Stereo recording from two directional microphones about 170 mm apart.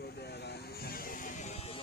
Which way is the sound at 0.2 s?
75° left (ahead or behind).